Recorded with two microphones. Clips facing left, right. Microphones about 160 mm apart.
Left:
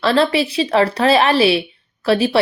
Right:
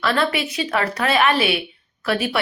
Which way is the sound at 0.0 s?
30° left (ahead or behind).